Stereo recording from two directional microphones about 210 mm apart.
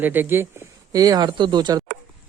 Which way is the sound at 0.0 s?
10° right (ahead or behind).